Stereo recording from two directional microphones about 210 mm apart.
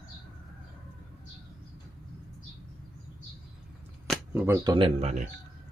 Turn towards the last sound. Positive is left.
turn(degrees=-30)  # may be behind; listen again after turning